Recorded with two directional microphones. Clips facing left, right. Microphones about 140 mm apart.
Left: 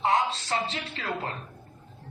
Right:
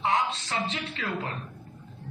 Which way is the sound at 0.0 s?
35° left (ahead or behind).